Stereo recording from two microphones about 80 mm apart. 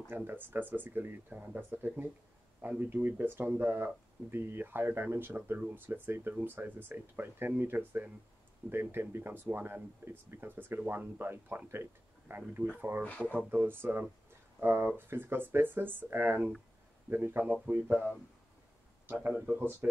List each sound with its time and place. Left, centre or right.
0.1 s speech: right
13.0 s speech: left
13.3 s speech: right
19.3 s speech: right